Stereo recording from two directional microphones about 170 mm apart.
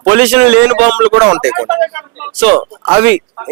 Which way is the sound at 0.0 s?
10° right (ahead or behind).